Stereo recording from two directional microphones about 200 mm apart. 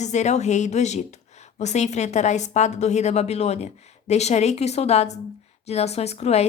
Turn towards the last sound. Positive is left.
turn(degrees=30)  # may be behind; listen again after turning